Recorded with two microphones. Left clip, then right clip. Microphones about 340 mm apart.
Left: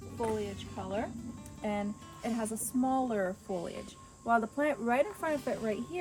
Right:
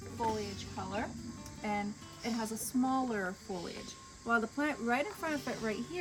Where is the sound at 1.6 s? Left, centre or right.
Centre.